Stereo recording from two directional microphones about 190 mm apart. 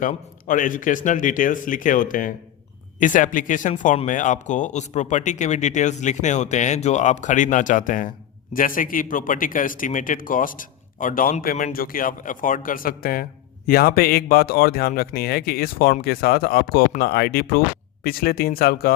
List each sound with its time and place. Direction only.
0.0 s a man's voice: 45° left (ahead or behind)